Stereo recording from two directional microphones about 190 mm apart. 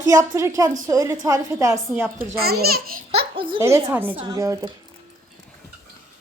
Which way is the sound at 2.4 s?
55° right (ahead or behind).